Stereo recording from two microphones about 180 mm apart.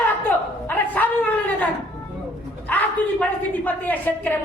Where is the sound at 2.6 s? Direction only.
10° left (ahead or behind).